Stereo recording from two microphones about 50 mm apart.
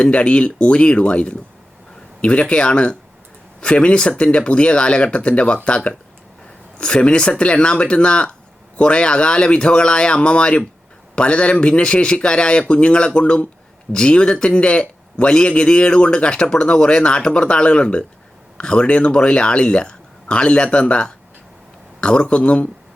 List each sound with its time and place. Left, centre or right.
0.0 s a man's voice: left